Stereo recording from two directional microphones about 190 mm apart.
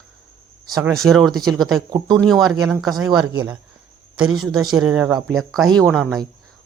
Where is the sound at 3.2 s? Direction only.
20° right (ahead or behind).